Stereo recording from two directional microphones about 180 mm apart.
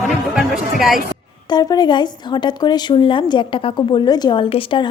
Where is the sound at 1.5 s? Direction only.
20° left (ahead or behind).